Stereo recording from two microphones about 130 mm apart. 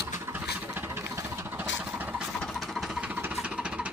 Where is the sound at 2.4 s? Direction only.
Centre (ahead or behind).